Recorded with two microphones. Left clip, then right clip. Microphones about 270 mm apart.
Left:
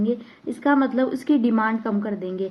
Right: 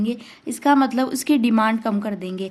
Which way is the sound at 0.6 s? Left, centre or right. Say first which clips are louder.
Right 2 dB; right.